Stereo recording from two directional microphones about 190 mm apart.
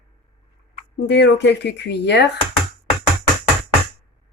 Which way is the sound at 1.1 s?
65° left (ahead or behind).